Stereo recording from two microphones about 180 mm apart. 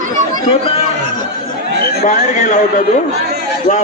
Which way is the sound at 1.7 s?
70° right (ahead or behind).